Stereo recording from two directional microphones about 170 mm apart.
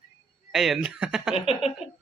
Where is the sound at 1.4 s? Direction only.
35° left (ahead or behind).